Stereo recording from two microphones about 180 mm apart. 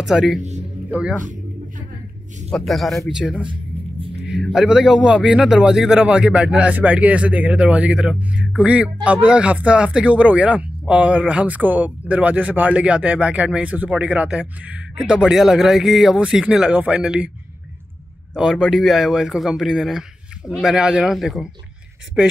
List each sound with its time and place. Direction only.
0.0 s speech: centre (ahead or behind)
0.4 s speech: 40° right (ahead or behind)
1.2 s a sound: 45° right (ahead or behind)
2.5 s speech: centre (ahead or behind)
18.3 s speech: centre (ahead or behind)